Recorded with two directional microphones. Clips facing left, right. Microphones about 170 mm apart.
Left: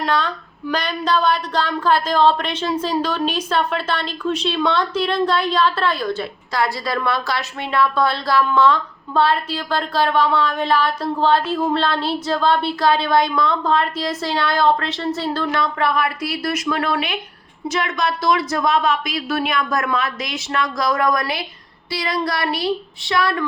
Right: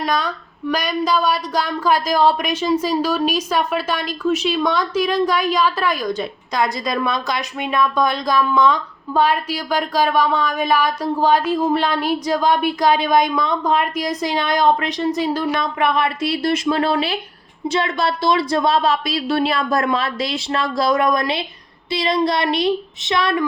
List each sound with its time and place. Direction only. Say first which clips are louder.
0.0 s a woman's voice: even; 10° right (ahead or behind)